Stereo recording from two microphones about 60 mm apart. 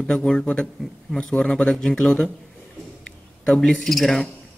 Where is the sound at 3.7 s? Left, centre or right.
Centre.